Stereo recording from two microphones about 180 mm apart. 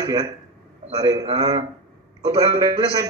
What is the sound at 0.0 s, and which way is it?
Speech, 20° right (ahead or behind).